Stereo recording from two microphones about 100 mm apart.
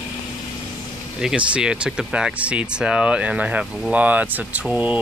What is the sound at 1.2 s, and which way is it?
Speech, 10° right (ahead or behind).